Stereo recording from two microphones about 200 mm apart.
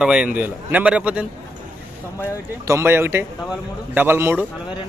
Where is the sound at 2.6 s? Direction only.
15° right (ahead or behind).